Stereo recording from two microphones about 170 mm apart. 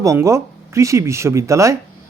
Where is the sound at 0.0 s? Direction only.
15° right (ahead or behind).